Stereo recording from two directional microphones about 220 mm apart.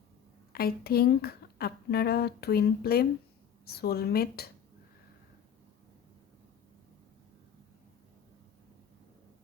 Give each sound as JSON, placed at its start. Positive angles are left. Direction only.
{"t": 0.5, "sound": "speech", "side_deg": 45}